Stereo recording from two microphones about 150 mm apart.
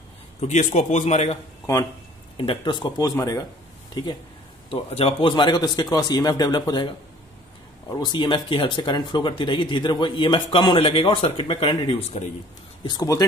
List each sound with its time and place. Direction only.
0.4 s a man's voice: 50° left (ahead or behind)
2.3 s speech: 35° left (ahead or behind)
4.6 s speech: 40° left (ahead or behind)
7.9 s speech: 30° left (ahead or behind)
12.8 s speech: 25° left (ahead or behind)